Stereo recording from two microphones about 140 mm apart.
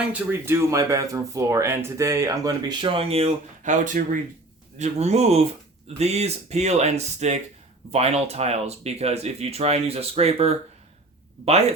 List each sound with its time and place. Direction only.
0.1 s speech: 20° right (ahead or behind); by 3.3 s 45° right (ahead or behind)
3.6 s speech: 65° right (ahead or behind)
4.8 s speech: 50° right (ahead or behind)